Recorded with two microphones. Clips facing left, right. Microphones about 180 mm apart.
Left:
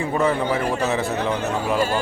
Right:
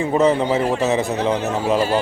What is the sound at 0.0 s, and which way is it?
A man's voice, 20° right (ahead or behind).